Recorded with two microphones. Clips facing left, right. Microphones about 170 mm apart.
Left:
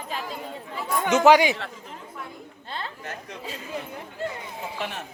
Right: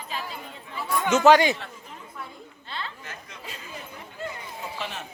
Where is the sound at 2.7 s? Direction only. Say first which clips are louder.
Left 2 dB; 45° left (ahead or behind).